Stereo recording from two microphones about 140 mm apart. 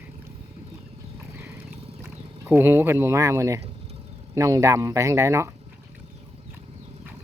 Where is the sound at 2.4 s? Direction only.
15° right (ahead or behind).